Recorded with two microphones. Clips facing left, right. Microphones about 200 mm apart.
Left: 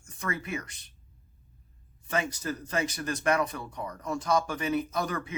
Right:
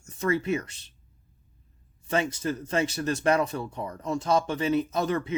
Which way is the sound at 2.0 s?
25° right (ahead or behind).